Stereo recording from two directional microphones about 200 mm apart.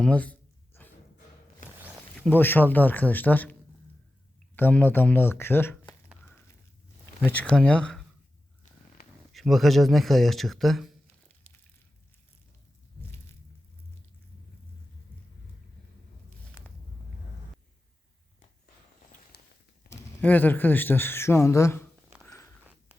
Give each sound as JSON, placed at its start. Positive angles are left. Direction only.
{"t": 0.0, "sound": "a sound", "side_deg": 5}
{"t": 1.6, "sound": "zipper", "side_deg": 40}
{"t": 2.2, "sound": "speech", "side_deg": 10}
{"t": 4.5, "sound": "speech", "side_deg": 10}
{"t": 7.3, "sound": "speech", "side_deg": 5}
{"t": 9.0, "sound": "a sound", "side_deg": 50}
{"t": 9.3, "sound": "speech", "side_deg": 0}
{"t": 19.3, "sound": "a sound", "side_deg": 50}
{"t": 19.9, "sound": "speech", "side_deg": 10}